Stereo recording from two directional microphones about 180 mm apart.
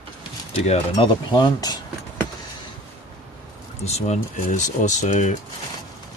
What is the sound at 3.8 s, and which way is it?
Speech, 35° left (ahead or behind).